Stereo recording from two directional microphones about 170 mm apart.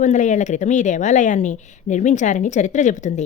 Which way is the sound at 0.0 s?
45° left (ahead or behind).